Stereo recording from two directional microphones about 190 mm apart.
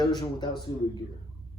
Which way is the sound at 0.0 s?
20° left (ahead or behind).